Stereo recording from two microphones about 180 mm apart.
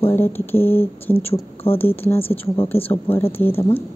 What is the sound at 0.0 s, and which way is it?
Speech, 10° left (ahead or behind).